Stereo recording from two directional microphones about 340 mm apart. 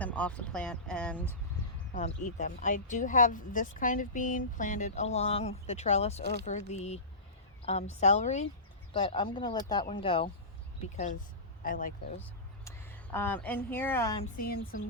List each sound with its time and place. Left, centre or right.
0.0 s speech: centre
1.9 s speech: left
12.2 s speech: centre
14.3 s speech: left